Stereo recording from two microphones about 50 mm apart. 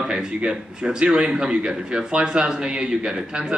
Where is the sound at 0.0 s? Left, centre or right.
Centre.